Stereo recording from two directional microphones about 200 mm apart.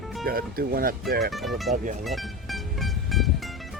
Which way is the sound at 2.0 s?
Centre (ahead or behind).